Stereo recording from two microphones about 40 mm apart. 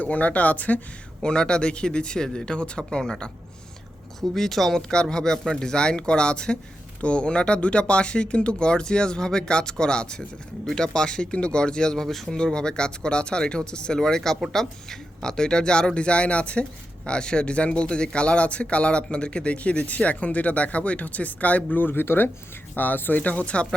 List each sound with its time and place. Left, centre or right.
0.0 s speech: left
1.2 s speech: left
4.2 s speech: centre
4.8 s speech: centre
12.0 s speech: centre
12.3 s speech: centre; by 21.8 s left
21.8 s speech: left
22.7 s speech: left